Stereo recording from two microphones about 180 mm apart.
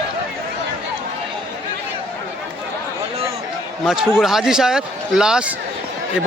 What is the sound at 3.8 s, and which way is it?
Speech, 5° right (ahead or behind).